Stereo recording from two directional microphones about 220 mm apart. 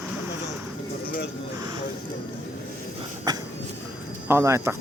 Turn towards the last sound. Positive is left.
turn(degrees=-10)  # may be behind; listen again after turning